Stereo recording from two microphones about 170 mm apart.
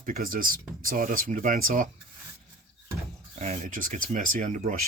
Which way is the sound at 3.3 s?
45° right (ahead or behind).